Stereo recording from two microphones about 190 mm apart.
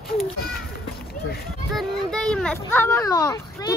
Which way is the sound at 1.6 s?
Centre (ahead or behind).